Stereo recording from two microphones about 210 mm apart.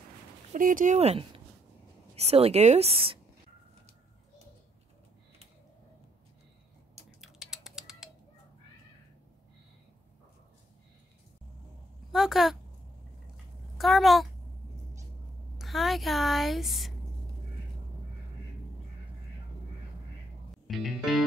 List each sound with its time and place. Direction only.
0.5 s speech: 40° right (ahead or behind)
7.2 s a sound: centre (ahead or behind)
12.1 s a woman's voice: centre (ahead or behind)
13.7 s speech: centre (ahead or behind)
15.5 s speech: centre (ahead or behind)
20.5 s music: centre (ahead or behind)